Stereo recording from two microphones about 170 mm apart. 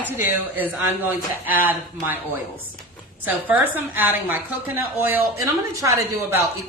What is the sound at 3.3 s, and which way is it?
A woman's voice, 10° right (ahead or behind).